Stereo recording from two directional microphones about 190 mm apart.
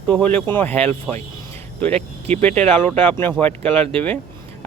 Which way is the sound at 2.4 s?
5° left (ahead or behind).